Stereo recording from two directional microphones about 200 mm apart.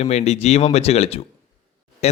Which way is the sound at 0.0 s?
35° left (ahead or behind).